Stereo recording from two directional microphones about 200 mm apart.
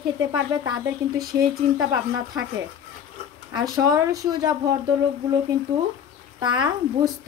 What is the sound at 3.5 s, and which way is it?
Speech, 20° right (ahead or behind).